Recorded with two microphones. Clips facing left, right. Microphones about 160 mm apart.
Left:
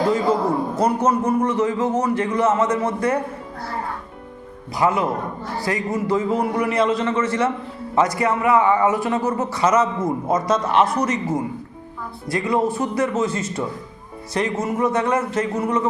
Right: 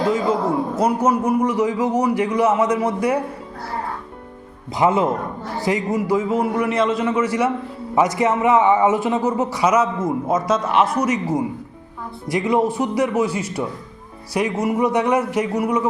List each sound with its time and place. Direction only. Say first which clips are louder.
0.8 s a man's voice: right 1 dB; 10° right (ahead or behind)
4.8 s a man's voice: right 2 dB; 20° right (ahead or behind)
6.1 s a man's voice: even; 5° right (ahead or behind)